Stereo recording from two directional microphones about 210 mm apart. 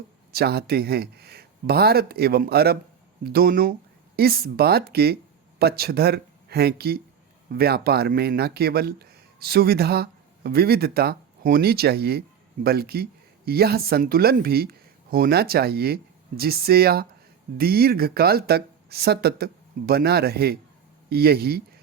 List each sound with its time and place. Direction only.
0.3 s speech: 50° right (ahead or behind)